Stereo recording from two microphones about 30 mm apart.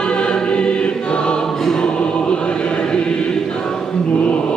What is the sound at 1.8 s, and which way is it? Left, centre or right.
Choir, left.